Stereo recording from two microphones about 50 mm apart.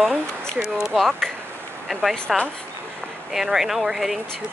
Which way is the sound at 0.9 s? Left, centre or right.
Centre.